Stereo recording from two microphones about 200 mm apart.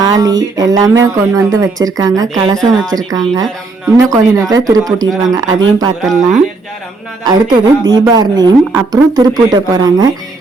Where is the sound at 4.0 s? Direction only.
15° right (ahead or behind).